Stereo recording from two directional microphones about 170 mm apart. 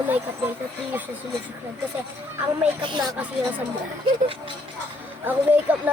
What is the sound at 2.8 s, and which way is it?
Speech, 25° right (ahead or behind).